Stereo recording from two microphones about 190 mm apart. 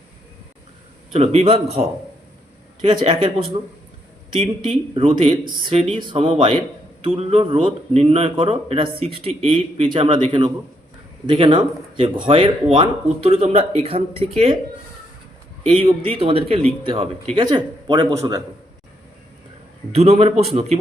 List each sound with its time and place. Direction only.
1.1 s a man's voice: 30° right (ahead or behind)
2.8 s a man's voice: 25° right (ahead or behind)
15.6 s a man's voice: 25° right (ahead or behind)
19.9 s a man's voice: 35° right (ahead or behind)